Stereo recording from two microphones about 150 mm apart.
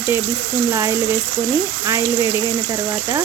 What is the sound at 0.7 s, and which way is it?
Frying, 20° right (ahead or behind).